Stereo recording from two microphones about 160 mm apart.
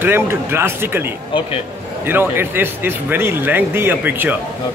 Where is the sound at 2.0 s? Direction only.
15° right (ahead or behind).